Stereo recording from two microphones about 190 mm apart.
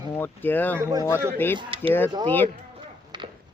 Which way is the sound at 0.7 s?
15° right (ahead or behind).